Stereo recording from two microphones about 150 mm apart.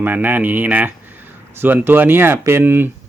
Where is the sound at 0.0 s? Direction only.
15° right (ahead or behind).